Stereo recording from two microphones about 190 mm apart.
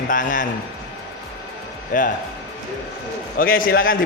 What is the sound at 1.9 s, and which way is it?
Speech, 45° left (ahead or behind).